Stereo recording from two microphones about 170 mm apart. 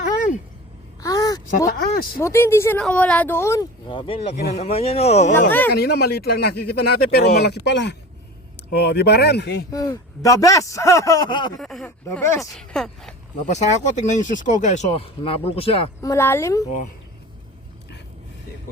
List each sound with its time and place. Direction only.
1.0 s a sound: 20° left (ahead or behind)
2.1 s speech: 15° left (ahead or behind); by 5.5 s 40° left (ahead or behind)
5.5 s speech: 10° left (ahead or behind)
5.7 s speech: 70° left (ahead or behind); by 7.9 s 90° left
8.7 s speech: 70° left (ahead or behind)
9.7 s speech: 20° left (ahead or behind)
11.6 s speech: centre (ahead or behind)
12.1 s speech: 15° left (ahead or behind)
12.4 s speech: 5° left (ahead or behind)
13.3 s speech: 45° left (ahead or behind)
16.0 s speech: 15° left (ahead or behind)